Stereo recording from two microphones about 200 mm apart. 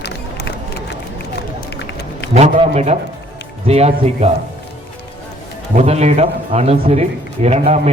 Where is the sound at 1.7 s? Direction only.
55° left (ahead or behind).